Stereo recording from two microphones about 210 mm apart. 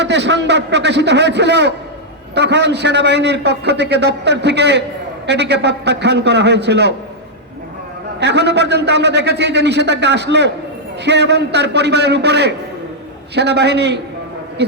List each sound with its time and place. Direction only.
0.0 s a man's voice: 55° right (ahead or behind)
8.2 s a man's voice: 55° right (ahead or behind)